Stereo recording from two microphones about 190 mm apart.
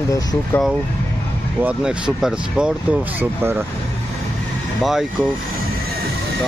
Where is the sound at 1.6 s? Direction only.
5° right (ahead or behind).